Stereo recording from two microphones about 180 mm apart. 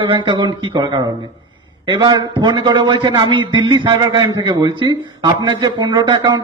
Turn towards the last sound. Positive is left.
turn(degrees=-25)  # may be behind; listen again after turning